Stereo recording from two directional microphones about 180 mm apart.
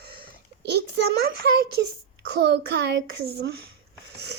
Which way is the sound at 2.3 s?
65° right (ahead or behind).